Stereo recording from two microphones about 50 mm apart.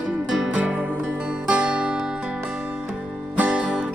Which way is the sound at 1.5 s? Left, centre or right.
Centre.